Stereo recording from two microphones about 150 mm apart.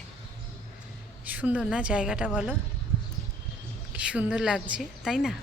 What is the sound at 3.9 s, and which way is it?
A woman's voice, 10° right (ahead or behind).